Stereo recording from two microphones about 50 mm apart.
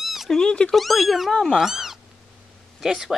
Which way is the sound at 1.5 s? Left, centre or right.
Centre.